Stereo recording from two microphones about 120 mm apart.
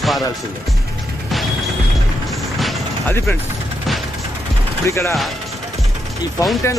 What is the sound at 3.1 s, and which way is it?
Speech, 20° left (ahead or behind).